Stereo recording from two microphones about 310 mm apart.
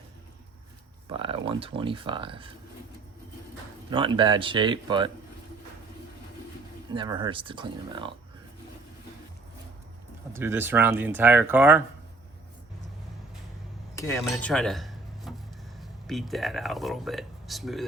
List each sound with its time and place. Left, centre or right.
1.0 s speech: centre
3.8 s speech: centre
6.9 s speech: centre
10.3 s speech: centre
13.9 s speech: centre